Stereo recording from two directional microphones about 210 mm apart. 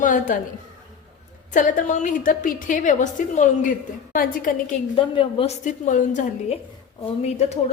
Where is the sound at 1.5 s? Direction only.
40° left (ahead or behind).